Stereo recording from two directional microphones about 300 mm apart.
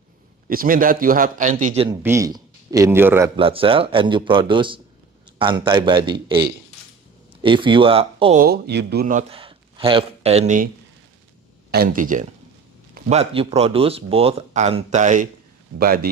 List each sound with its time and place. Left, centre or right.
0.5 s a man's voice: right; by 3.3 s centre
3.3 s speech: centre
7.4 s speech: centre
11.7 s speech: right